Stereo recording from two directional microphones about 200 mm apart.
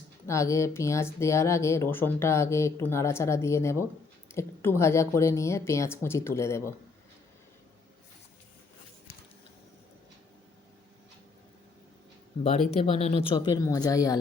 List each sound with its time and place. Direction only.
0.3 s speech: 15° left (ahead or behind)
12.4 s speech: 30° left (ahead or behind)